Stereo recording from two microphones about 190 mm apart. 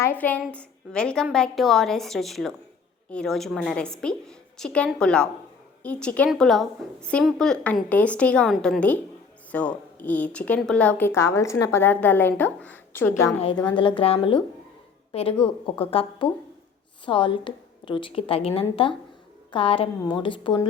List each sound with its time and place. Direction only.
0.0 s a woman's voice: 10° left (ahead or behind)
13.7 s a woman's voice: 25° left (ahead or behind)